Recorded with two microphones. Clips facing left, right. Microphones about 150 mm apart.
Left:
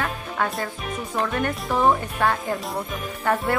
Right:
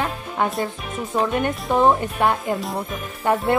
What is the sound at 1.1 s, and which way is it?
Speech, 20° right (ahead or behind).